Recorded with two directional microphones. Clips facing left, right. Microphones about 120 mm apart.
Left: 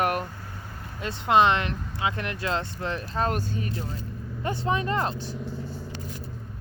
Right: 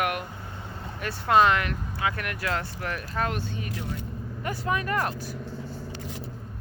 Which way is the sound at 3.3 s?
40° left (ahead or behind).